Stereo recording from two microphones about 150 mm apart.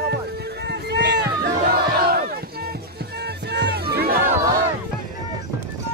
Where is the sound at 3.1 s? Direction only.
90° right.